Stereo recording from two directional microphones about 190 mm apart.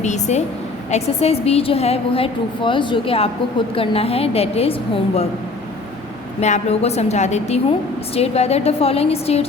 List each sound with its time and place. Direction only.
0.0 s a woman's voice: 35° left (ahead or behind)
6.4 s a woman's voice: 35° left (ahead or behind)